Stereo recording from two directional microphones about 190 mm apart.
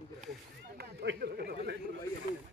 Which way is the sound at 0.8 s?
60° right (ahead or behind).